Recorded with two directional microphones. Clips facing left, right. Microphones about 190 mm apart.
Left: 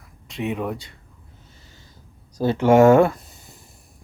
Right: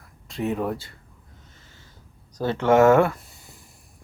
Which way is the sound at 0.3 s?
20° left (ahead or behind).